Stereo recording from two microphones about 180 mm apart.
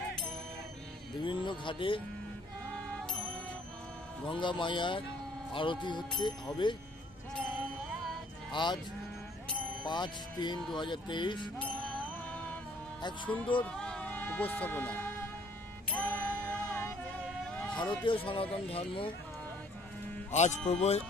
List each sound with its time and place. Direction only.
1.2 s speech: 25° left (ahead or behind)
4.3 s speech: 25° left (ahead or behind)
8.6 s speech: 25° left (ahead or behind)
9.8 s speech: 25° left (ahead or behind)
11.5 s music: 5° left (ahead or behind)
13.6 s music: 5° left (ahead or behind)
17.5 s vehicle: 5° left (ahead or behind)
18.0 s speech: 30° left (ahead or behind)
20.2 s speech: 40° left (ahead or behind)